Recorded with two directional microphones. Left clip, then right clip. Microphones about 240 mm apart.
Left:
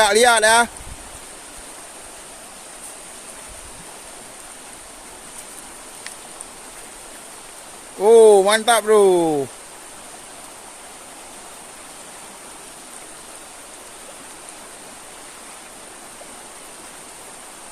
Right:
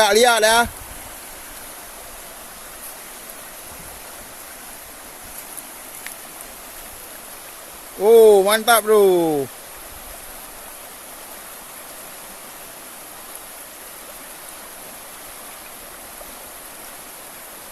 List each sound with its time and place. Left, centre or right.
0.0 s speech: centre
8.0 s speech: centre